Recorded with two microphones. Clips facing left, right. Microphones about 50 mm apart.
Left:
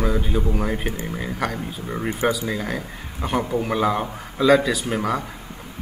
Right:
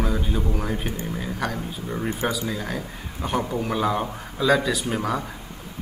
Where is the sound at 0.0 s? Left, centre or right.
Centre.